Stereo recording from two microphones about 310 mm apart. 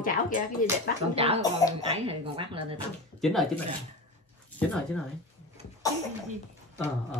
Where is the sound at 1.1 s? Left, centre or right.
Centre.